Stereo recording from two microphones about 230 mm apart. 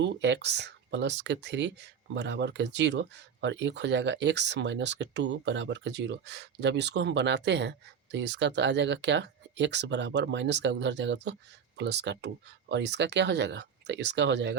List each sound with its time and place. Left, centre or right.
0.0 s speech: right